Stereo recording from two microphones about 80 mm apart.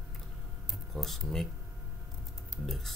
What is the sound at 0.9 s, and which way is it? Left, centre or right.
Speech, centre.